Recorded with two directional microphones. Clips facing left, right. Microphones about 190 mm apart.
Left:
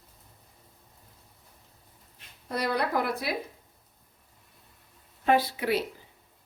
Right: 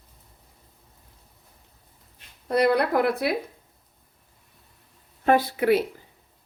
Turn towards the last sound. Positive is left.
turn(degrees=-50)  # may be behind; listen again after turning